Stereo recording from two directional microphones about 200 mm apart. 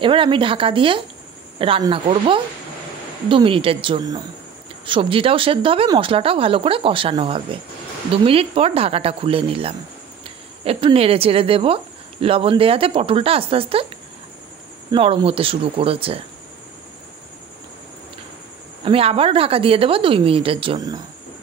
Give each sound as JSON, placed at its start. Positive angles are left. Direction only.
{"t": 0.0, "sound": "speech", "side_deg": -25}
{"t": 14.9, "sound": "speech", "side_deg": -25}
{"t": 18.9, "sound": "speech", "side_deg": -30}